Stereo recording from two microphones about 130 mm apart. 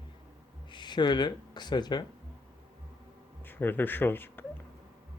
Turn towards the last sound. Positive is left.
turn(degrees=15)  # may be behind; listen again after turning